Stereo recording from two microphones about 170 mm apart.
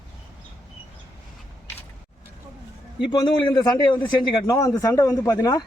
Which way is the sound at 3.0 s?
25° left (ahead or behind).